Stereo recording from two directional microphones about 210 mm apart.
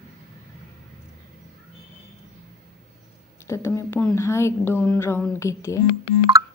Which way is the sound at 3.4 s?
15° left (ahead or behind).